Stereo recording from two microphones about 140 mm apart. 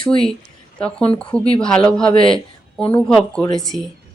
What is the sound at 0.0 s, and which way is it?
Speech, 40° left (ahead or behind).